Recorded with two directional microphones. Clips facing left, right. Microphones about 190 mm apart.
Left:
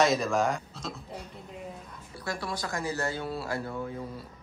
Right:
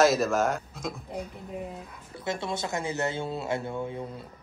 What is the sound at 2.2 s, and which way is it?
Speech, 25° right (ahead or behind).